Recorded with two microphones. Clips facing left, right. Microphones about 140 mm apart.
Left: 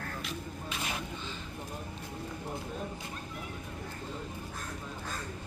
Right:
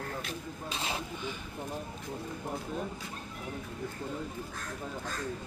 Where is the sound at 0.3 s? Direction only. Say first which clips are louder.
Even; 30° right (ahead or behind).